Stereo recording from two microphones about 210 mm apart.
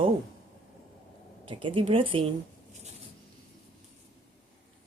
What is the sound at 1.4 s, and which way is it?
Speech, 25° right (ahead or behind).